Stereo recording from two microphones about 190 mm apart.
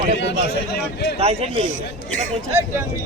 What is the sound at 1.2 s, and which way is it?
Speech, 30° right (ahead or behind).